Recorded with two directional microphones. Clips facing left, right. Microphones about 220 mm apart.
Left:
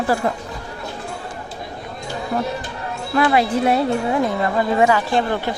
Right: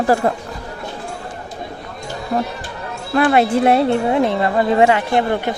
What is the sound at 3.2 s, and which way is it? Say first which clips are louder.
Speech: right 3 dB; 50° right (ahead or behind).